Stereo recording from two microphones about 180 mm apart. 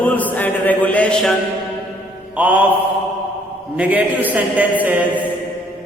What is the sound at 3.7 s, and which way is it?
Mantra, 10° right (ahead or behind).